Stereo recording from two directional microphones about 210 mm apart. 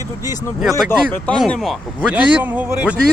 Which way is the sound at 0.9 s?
5° left (ahead or behind).